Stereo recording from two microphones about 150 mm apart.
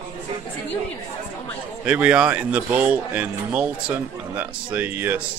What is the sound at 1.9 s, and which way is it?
Speech, 10° right (ahead or behind).